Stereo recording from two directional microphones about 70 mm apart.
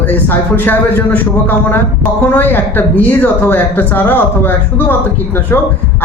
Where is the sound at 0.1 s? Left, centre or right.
Left.